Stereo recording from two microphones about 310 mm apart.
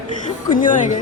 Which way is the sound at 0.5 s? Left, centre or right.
Left.